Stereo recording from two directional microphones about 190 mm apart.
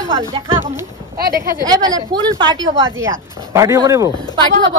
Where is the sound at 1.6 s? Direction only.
20° right (ahead or behind).